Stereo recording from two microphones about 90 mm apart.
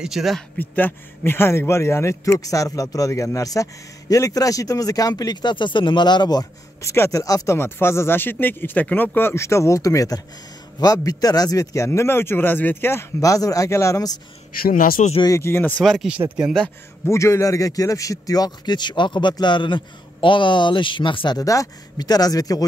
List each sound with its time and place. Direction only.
0.0 s speech: 5° right (ahead or behind)
0.6 s speech: 20° left (ahead or behind); by 6.4 s 50° left (ahead or behind)
6.8 s speech: 35° left (ahead or behind)
7.5 s speech: 25° left (ahead or behind)
13.2 s speech: 40° left (ahead or behind)
15.2 s speech: 30° left (ahead or behind)
15.8 s speech: centre (ahead or behind)
17.0 s a man's voice: 30° left (ahead or behind); by 21.4 s 70° left (ahead or behind)
21.4 s speech: 40° left (ahead or behind)